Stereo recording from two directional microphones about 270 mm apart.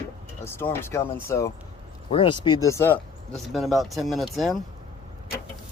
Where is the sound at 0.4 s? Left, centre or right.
Centre.